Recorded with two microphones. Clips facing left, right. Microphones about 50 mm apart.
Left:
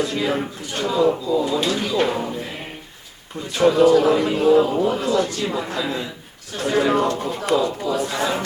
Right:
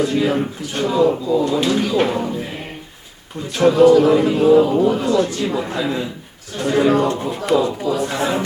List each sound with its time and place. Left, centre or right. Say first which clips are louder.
0.0 s speech: right 4 dB; centre
1.2 s speech: right 3 dB; centre
2.0 s speech: right 3 dB; centre
3.5 s speech: right 3 dB; centre
6.6 s speech: right 3 dB; centre